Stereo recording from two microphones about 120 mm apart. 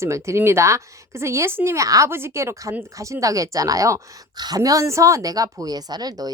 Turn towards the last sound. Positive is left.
turn(degrees=-35)  # may be behind; listen again after turning